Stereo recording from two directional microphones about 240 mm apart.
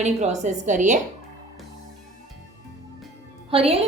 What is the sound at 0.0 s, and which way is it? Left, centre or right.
Speech, right.